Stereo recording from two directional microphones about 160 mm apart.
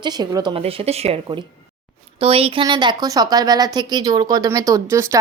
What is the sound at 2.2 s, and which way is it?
Speech, 35° right (ahead or behind).